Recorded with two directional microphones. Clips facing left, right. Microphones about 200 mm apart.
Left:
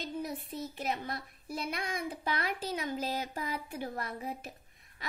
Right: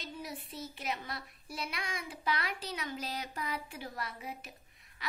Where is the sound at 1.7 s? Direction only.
55° left (ahead or behind).